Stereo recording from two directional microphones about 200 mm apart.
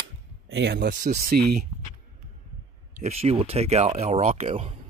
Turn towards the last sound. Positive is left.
turn(degrees=-30)  # may be behind; listen again after turning